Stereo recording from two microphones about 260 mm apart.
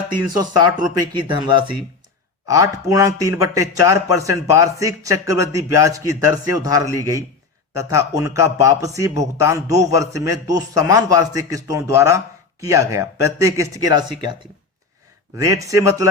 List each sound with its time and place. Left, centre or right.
0.9 s speech: centre
15.4 s speech: centre